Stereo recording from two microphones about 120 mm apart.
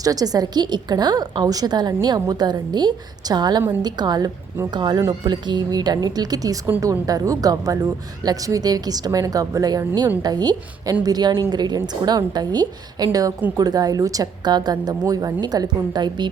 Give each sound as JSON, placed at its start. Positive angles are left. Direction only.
{"t": 0.0, "sound": "a woman's voice", "side_deg": -30}
{"t": 6.7, "sound": "a woman's voice", "side_deg": -20}